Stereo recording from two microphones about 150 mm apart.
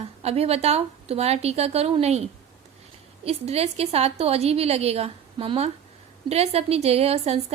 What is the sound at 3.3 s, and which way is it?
A woman's voice, 45° right (ahead or behind).